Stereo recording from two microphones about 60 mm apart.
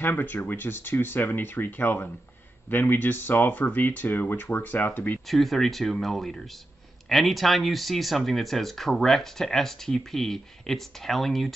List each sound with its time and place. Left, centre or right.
0.0 s speech: left
5.3 s speech: centre